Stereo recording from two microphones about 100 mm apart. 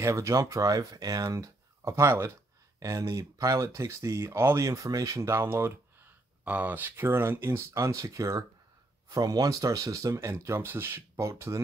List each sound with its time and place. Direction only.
0.0 s speech: 30° right (ahead or behind)